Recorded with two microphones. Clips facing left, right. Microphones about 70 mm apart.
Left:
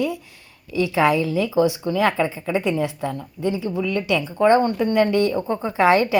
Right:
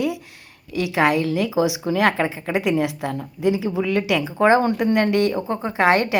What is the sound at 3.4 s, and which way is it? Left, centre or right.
Speech, right.